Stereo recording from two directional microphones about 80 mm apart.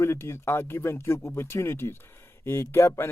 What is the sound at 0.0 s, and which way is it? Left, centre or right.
Speech, left.